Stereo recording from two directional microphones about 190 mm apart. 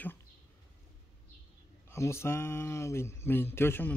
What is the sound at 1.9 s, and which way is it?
Speech, 15° left (ahead or behind).